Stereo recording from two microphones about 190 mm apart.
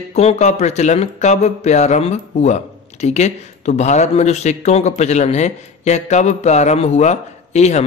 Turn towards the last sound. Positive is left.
turn(degrees=35)  # may be behind; listen again after turning